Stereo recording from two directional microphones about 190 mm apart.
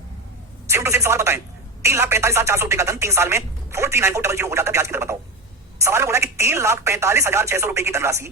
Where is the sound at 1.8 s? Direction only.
15° right (ahead or behind).